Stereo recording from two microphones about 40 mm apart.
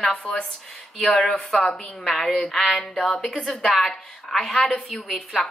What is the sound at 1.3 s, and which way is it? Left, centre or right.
A woman's voice, centre.